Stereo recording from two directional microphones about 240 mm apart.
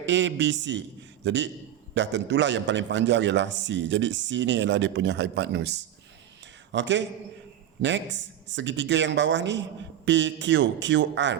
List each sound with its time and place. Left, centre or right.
0.0 s a man's voice: right